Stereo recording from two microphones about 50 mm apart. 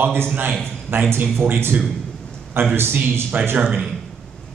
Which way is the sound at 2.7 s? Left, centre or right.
Right.